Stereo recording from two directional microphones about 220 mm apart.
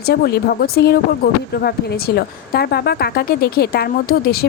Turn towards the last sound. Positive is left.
turn(degrees=45)  # may be behind; listen again after turning